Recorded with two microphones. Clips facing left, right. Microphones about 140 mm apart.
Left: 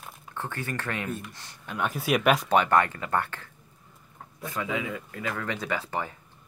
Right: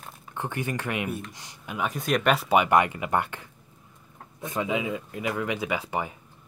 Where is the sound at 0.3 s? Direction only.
15° right (ahead or behind).